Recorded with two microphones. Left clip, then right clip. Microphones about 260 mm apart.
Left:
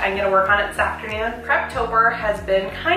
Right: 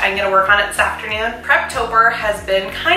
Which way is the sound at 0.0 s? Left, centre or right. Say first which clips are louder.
Right 3 dB; centre.